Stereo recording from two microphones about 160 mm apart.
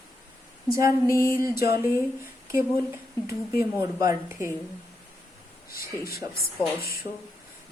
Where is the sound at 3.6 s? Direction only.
20° right (ahead or behind).